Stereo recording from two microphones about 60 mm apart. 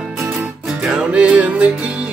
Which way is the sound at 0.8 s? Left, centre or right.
Centre.